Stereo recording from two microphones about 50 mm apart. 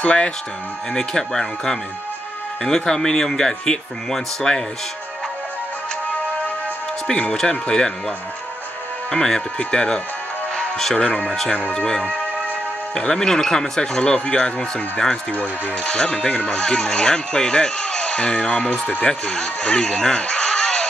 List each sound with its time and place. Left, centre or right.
0.0 s speech: left
7.3 s speech: centre
9.1 s speech: centre
12.0 s music: right
13.1 s speech: centre; by 19.0 s left
19.0 s speech: centre